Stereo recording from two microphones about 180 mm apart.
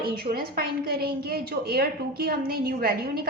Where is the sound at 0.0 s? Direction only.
55° right (ahead or behind).